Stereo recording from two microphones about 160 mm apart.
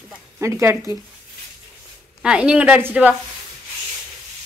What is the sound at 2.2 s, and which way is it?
Speech, 5° right (ahead or behind).